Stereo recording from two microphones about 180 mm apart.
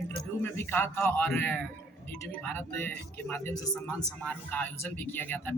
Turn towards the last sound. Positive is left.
turn(degrees=10)  # may be behind; listen again after turning